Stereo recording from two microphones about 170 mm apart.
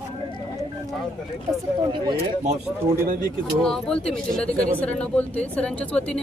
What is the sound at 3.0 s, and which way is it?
Speech, 55° right (ahead or behind).